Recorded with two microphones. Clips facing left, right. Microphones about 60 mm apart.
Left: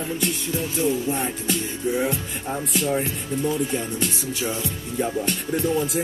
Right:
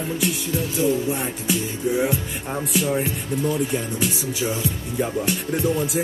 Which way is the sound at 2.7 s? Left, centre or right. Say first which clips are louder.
Right 1 dB; centre.